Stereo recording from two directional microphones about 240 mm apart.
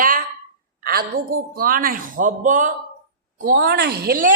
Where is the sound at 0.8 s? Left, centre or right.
Right.